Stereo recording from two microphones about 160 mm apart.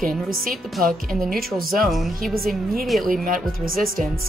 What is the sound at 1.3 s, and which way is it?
Speech, centre (ahead or behind).